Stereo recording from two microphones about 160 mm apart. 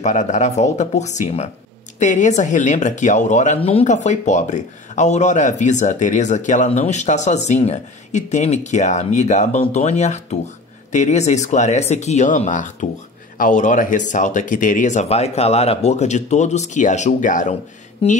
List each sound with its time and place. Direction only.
0.0 s speech: 50° left (ahead or behind)
18.0 s speech: 40° left (ahead or behind)